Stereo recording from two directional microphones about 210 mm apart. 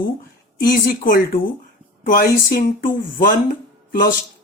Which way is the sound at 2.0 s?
40° left (ahead or behind).